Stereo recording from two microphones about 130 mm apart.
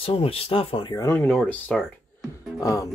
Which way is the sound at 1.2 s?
10° left (ahead or behind).